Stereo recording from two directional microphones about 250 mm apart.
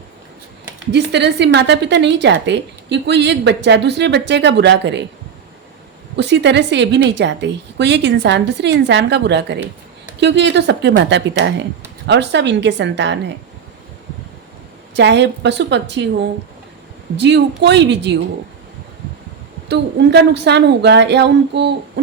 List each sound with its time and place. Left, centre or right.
0.9 s a woman's voice: right
6.1 s a woman's voice: right
14.9 s a woman's voice: right
17.2 s a woman's voice: right
19.6 s a woman's voice: right